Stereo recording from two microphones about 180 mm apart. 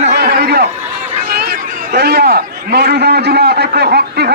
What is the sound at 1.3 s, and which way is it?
Chatter, 60° right (ahead or behind).